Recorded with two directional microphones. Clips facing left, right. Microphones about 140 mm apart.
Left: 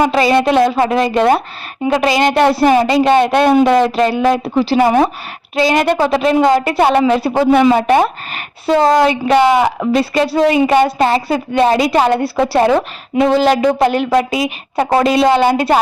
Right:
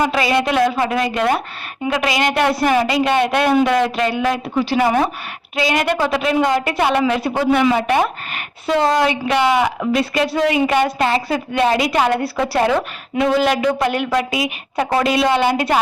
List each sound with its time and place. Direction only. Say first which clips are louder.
0.0 s a woman's voice: left 5 dB; 30° left (ahead or behind)